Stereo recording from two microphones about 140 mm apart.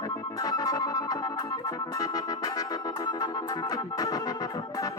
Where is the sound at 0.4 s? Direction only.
25° left (ahead or behind).